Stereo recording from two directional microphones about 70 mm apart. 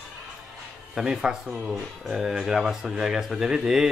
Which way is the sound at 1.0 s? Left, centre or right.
Centre.